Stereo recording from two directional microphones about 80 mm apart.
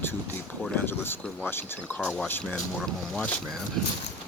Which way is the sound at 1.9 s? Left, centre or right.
Centre.